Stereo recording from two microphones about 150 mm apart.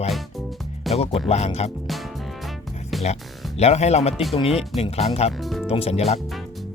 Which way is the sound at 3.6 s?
45° left (ahead or behind).